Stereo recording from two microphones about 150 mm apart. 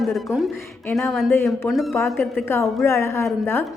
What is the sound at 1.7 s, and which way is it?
Speech, centre (ahead or behind).